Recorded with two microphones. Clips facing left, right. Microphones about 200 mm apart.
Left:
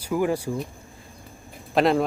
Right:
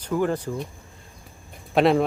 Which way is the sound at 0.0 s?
10° left (ahead or behind).